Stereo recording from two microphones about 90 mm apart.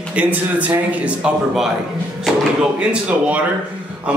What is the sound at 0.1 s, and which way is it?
Speech, 15° right (ahead or behind).